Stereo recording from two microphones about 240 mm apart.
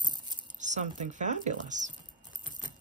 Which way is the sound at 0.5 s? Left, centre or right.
Right.